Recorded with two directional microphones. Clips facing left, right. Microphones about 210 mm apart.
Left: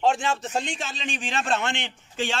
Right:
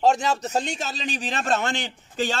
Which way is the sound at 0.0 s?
40° right (ahead or behind).